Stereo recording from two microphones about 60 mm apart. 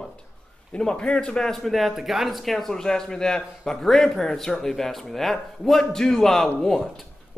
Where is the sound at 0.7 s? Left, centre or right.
Centre.